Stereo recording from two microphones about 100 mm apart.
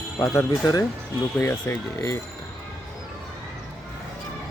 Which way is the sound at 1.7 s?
15° left (ahead or behind).